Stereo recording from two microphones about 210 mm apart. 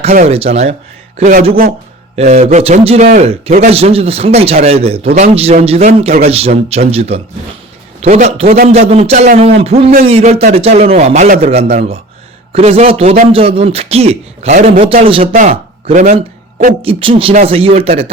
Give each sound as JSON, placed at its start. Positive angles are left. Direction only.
{"t": 0.0, "sound": "a man's voice", "side_deg": -30}
{"t": 2.1, "sound": "a man's voice", "side_deg": -30}
{"t": 16.8, "sound": "a man's voice", "side_deg": -25}